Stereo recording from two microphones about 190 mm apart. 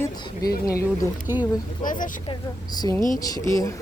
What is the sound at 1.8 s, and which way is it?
Speech, 45° left (ahead or behind).